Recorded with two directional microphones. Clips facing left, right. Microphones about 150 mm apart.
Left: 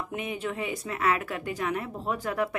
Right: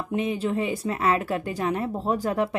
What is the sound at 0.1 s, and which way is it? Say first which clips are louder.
A woman's voice: right 10 dB; 30° right (ahead or behind).